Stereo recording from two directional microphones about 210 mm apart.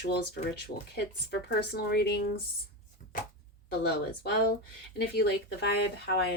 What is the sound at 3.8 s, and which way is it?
A woman's voice, 50° left (ahead or behind).